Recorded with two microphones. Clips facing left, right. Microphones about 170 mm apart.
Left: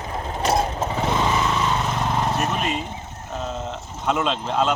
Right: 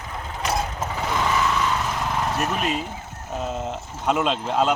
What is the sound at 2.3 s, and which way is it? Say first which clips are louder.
Speech: even; centre (ahead or behind).